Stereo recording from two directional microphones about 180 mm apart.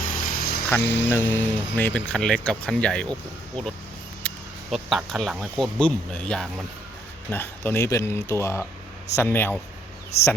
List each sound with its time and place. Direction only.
0.1 s vehicle: 50° left (ahead or behind)
0.8 s speech: 75° left (ahead or behind)
1.0 s speech: 10° left (ahead or behind)
4.2 s a sound: 5° left (ahead or behind)
4.7 s speech: centre (ahead or behind)